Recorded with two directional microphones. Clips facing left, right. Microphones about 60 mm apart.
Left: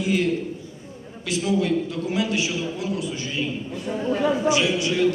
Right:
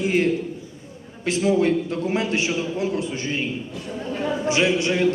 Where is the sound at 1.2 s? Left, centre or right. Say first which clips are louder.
Right 3 dB; right.